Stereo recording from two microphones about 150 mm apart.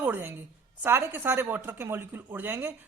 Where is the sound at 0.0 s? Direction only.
15° right (ahead or behind).